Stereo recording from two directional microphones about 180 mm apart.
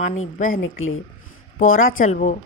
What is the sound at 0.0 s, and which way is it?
Speech, 45° left (ahead or behind).